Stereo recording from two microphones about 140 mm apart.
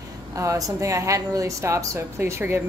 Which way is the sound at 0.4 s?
25° right (ahead or behind).